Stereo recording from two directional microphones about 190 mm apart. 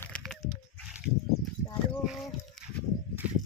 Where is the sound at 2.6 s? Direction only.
Centre (ahead or behind).